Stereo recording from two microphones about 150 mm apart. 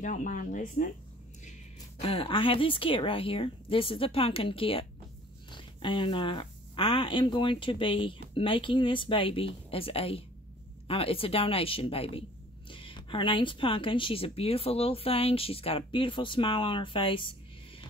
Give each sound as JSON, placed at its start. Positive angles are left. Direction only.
{"t": 0.0, "sound": "speech", "side_deg": 55}
{"t": 2.0, "sound": "a woman's voice", "side_deg": 40}